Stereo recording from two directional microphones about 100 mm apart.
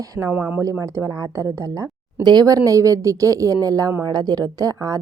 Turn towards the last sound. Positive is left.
turn(degrees=-35)  # may be behind; listen again after turning